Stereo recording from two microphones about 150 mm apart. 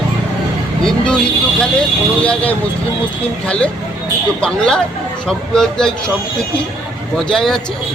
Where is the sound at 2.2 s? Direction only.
10° left (ahead or behind).